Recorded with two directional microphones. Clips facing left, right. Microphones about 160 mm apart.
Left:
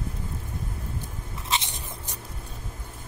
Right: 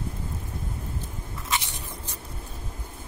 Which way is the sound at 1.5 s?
20° left (ahead or behind).